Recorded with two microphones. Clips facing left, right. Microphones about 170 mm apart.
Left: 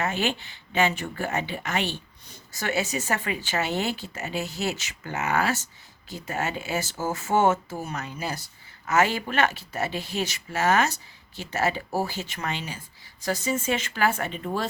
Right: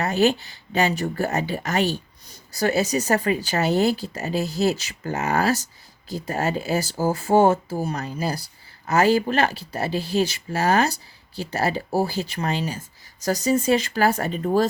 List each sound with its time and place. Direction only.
0.0 s speech: 40° right (ahead or behind)